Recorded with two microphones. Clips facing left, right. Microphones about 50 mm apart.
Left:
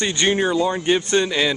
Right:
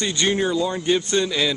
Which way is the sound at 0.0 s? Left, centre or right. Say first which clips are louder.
Left 2 dB; left.